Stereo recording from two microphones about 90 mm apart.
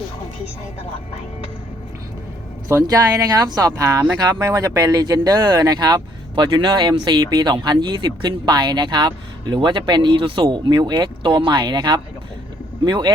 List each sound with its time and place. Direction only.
2.8 s speech: 40° right (ahead or behind)